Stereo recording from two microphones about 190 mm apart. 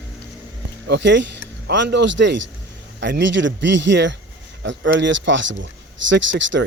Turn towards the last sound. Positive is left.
turn(degrees=-75)  # may be behind; listen again after turning